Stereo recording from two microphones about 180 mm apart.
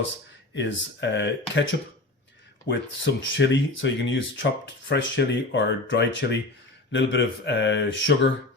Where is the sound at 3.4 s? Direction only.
90° left.